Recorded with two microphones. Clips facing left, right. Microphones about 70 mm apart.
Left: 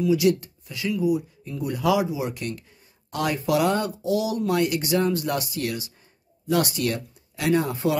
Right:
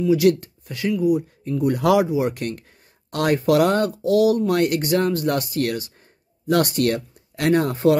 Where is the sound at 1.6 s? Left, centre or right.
Right.